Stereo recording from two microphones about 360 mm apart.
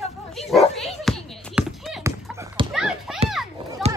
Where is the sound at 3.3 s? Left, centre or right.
Centre.